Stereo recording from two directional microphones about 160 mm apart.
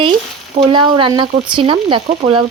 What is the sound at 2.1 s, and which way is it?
Speech, 45° right (ahead or behind).